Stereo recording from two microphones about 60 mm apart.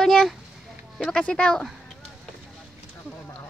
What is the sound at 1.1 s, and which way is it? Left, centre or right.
Speech, centre.